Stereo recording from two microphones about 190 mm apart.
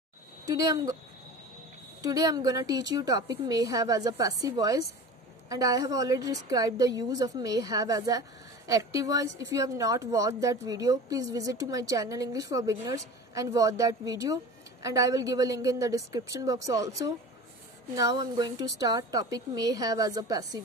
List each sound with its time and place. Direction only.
0.5 s a woman's voice: 20° right (ahead or behind)
2.0 s a woman's voice: 20° right (ahead or behind)